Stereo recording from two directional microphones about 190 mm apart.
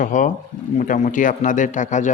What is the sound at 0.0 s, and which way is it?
Speech, 45° left (ahead or behind).